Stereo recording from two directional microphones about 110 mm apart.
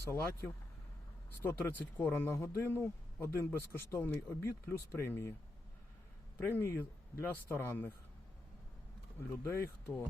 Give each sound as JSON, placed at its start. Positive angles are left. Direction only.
{"t": 0.0, "sound": "a man's voice", "side_deg": 25}
{"t": 6.3, "sound": "a man's voice", "side_deg": 20}
{"t": 9.4, "sound": "a man's voice", "side_deg": 25}